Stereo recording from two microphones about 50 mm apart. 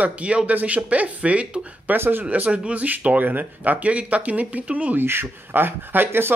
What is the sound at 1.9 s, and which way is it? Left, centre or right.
Speech, right.